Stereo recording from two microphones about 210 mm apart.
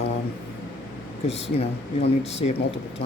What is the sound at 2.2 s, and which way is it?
Speech, 30° left (ahead or behind).